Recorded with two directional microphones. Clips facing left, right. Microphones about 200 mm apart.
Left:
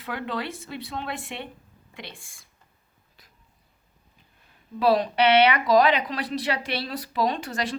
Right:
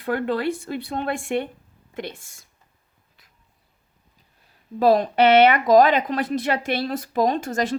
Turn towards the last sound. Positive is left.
turn(degrees=-45)  # may be behind; listen again after turning